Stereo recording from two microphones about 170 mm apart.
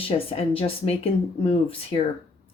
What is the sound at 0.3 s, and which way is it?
Speech, 35° left (ahead or behind).